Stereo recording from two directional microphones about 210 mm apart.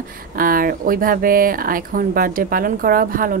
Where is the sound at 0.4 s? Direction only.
40° right (ahead or behind).